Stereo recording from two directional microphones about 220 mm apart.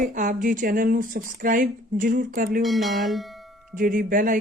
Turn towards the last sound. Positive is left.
turn(degrees=-40)  # may be behind; listen again after turning